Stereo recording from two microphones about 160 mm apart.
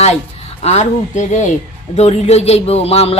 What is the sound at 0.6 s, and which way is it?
A woman's voice, 45° left (ahead or behind).